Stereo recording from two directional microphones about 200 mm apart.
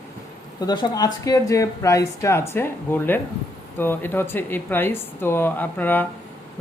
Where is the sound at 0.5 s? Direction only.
20° left (ahead or behind).